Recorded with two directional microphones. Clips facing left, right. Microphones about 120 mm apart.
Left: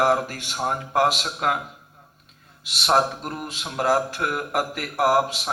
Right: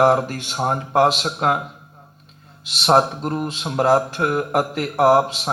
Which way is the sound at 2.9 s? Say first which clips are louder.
Right 5 dB; 30° right (ahead or behind).